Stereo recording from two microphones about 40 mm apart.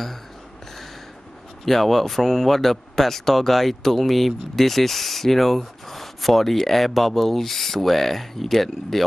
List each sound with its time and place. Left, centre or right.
1.7 s speech: centre